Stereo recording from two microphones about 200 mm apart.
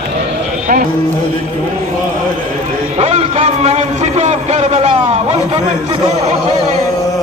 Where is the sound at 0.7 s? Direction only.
35° right (ahead or behind).